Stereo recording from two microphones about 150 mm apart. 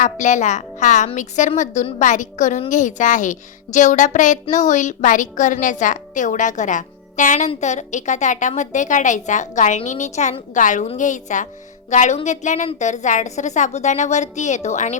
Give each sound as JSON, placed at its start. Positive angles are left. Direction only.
{"t": 0.0, "sound": "a woman's voice", "side_deg": 55}